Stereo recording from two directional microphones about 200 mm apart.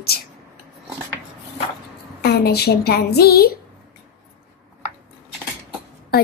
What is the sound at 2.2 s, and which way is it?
A woman's voice, 55° left (ahead or behind).